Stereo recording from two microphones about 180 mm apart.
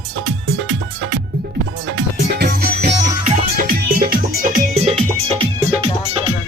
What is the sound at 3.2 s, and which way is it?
Music, 50° right (ahead or behind).